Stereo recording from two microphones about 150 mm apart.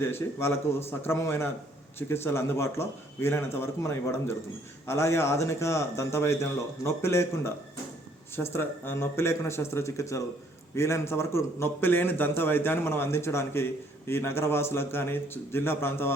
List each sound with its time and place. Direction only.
0.0 s a man's voice: 15° left (ahead or behind)